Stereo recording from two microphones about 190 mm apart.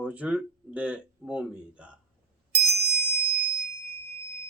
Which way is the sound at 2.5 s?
55° right (ahead or behind).